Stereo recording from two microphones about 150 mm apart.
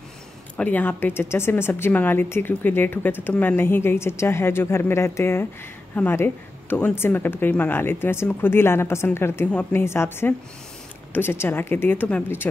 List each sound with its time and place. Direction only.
0.6 s speech: 10° left (ahead or behind)